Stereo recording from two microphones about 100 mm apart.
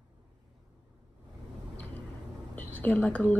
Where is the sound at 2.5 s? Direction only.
15° left (ahead or behind).